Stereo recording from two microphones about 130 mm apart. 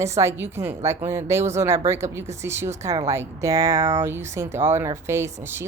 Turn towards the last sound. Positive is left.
turn(degrees=-15)  # may be behind; listen again after turning